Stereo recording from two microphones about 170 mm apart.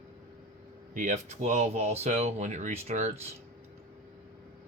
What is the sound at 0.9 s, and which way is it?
Speech, 45° right (ahead or behind).